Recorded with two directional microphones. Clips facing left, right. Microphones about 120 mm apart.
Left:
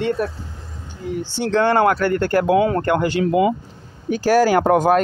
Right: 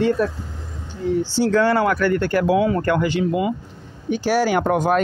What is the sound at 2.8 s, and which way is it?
Speech, 20° left (ahead or behind).